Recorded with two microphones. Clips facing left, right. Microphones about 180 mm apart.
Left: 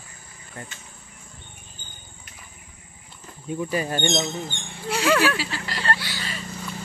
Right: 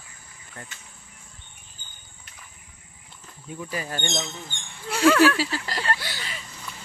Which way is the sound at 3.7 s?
25° left (ahead or behind).